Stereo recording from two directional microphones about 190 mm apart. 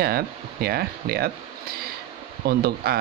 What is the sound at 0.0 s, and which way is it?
Speech, 55° right (ahead or behind).